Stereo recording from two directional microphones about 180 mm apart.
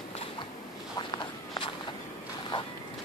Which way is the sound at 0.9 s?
25° left (ahead or behind).